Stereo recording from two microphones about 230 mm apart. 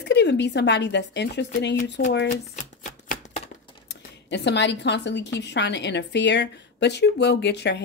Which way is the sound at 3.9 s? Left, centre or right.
Left.